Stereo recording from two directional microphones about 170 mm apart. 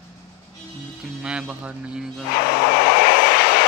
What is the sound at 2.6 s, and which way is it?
Vehicle, 65° left (ahead or behind).